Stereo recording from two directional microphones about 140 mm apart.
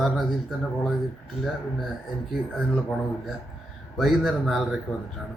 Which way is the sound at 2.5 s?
Centre (ahead or behind).